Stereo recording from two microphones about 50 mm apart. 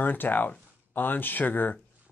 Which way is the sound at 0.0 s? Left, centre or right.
Left.